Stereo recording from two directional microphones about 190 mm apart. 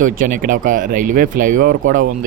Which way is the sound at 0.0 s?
45° right (ahead or behind).